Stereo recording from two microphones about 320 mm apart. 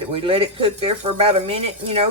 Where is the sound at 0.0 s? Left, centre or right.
Centre.